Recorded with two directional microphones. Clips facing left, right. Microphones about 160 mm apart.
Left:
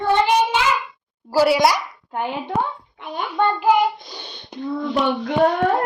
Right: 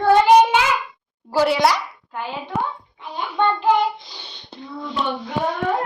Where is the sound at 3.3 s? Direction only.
10° left (ahead or behind).